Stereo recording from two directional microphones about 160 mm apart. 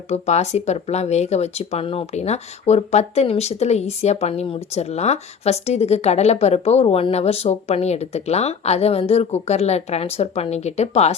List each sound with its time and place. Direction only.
0.1 s speech: 45° left (ahead or behind)